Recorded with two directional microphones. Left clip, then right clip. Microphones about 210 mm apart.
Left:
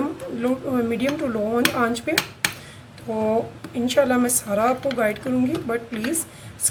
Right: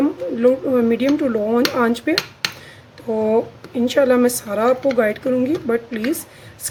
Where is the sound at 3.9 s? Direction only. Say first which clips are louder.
Right 4 dB; 40° right (ahead or behind).